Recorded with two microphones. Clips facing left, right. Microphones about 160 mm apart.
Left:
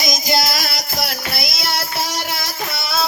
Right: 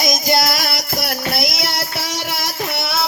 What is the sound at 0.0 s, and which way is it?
Music, 60° right (ahead or behind).